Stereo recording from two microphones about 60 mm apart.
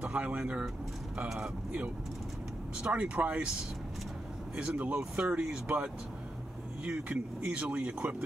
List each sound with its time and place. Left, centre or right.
0.0 s speech: right
2.8 s speech: right
4.6 s speech: right